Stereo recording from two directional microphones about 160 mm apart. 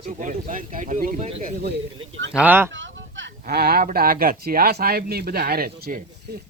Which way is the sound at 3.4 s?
70° right (ahead or behind).